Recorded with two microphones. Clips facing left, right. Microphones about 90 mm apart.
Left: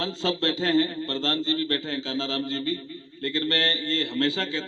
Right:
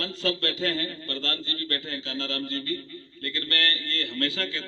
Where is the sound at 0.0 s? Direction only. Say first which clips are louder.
Left 3 dB; 25° left (ahead or behind).